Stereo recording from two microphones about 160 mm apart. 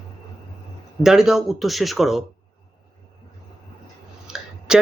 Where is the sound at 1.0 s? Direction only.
5° right (ahead or behind).